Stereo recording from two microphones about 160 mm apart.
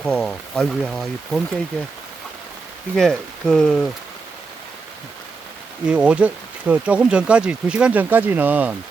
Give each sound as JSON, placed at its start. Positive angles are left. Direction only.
{"t": 0.0, "sound": "speech", "side_deg": 5}
{"t": 2.9, "sound": "speech", "side_deg": 0}
{"t": 5.8, "sound": "speech", "side_deg": -5}